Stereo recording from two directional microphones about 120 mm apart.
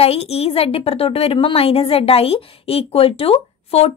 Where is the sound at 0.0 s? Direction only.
60° left (ahead or behind).